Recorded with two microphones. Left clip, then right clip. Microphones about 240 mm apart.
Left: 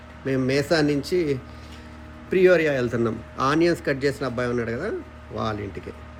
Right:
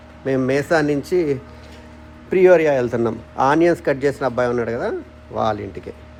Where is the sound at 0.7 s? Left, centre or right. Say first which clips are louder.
Right 4 dB; centre.